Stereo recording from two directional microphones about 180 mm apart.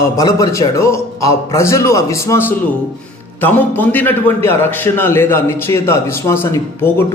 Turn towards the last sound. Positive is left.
turn(degrees=15)  # may be behind; listen again after turning